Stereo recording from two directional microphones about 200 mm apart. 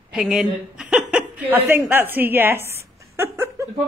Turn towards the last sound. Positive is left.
turn(degrees=-15)  # may be behind; listen again after turning